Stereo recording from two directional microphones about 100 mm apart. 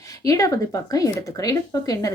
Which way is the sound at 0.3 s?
35° left (ahead or behind).